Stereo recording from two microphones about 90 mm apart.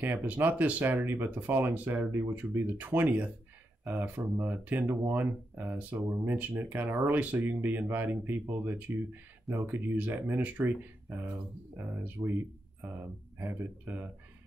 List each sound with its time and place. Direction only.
0.0 s speech: 20° right (ahead or behind)
13.4 s speech: 25° right (ahead or behind)